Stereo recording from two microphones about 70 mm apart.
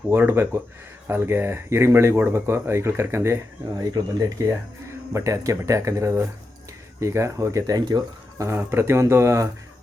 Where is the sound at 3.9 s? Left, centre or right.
Right.